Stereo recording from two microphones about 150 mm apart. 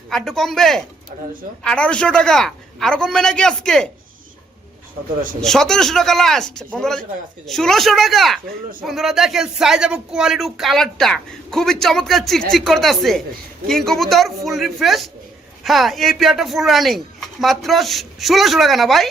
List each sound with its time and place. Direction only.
0.1 s speech: centre (ahead or behind)
1.1 s speech: 55° right (ahead or behind)
1.6 s speech: 10° left (ahead or behind)
5.4 s speech: 5° left (ahead or behind)